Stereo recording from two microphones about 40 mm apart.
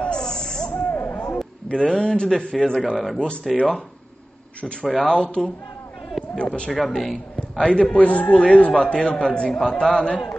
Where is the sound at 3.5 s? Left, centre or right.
Centre.